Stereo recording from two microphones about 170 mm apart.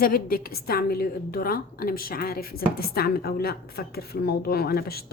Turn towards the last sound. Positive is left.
turn(degrees=65)  # may be behind; listen again after turning